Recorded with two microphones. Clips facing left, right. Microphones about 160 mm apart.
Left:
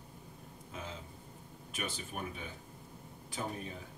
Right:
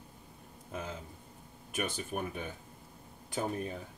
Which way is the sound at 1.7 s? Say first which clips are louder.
Right 5 dB; 50° right (ahead or behind).